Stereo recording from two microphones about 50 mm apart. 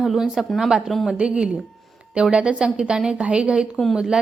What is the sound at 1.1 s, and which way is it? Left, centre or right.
A woman's voice, centre.